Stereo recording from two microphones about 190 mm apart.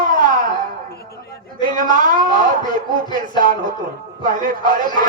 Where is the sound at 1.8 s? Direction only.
45° right (ahead or behind).